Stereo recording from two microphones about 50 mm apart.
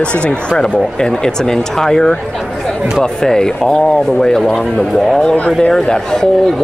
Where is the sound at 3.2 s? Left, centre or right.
Centre.